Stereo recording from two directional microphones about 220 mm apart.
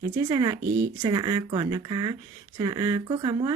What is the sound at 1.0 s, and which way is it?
Speech, 20° right (ahead or behind).